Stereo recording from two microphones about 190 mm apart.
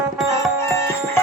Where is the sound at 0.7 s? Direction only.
15° left (ahead or behind).